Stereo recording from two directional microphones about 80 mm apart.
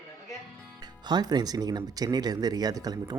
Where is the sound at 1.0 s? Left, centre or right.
Right.